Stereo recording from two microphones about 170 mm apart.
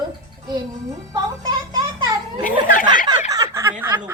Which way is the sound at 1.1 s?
25° right (ahead or behind).